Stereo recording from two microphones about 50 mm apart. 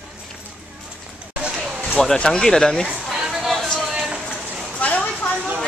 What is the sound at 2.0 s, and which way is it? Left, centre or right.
Speech, centre.